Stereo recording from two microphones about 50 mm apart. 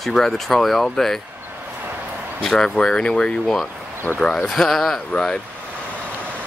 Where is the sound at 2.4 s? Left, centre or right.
Centre.